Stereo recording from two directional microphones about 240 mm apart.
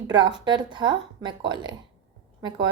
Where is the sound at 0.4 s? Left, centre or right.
Centre.